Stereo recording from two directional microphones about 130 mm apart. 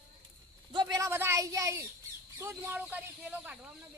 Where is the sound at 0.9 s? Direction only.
20° right (ahead or behind).